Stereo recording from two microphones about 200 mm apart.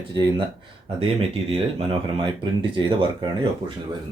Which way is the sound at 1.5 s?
25° right (ahead or behind).